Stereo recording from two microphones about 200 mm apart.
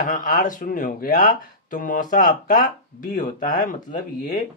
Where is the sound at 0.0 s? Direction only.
40° left (ahead or behind).